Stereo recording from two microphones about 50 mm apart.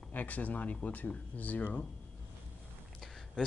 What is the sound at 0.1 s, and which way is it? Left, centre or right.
Speech, left.